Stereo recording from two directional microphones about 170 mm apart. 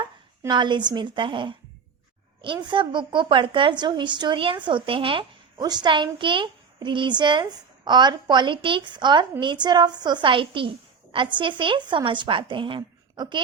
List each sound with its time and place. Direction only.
0.0 s a woman's voice: 25° right (ahead or behind)